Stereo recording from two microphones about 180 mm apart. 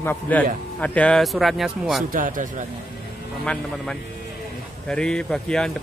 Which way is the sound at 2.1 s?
50° right (ahead or behind).